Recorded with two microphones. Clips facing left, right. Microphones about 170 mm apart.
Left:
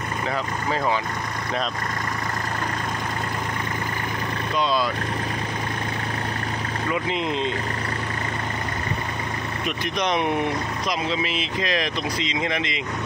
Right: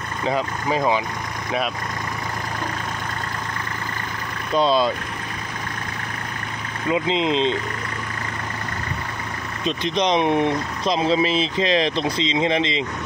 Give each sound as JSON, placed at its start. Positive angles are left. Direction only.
{"t": 0.3, "sound": "speech", "side_deg": -15}
{"t": 4.6, "sound": "speech", "side_deg": -30}
{"t": 6.9, "sound": "speech", "side_deg": -20}
{"t": 9.7, "sound": "speech", "side_deg": -25}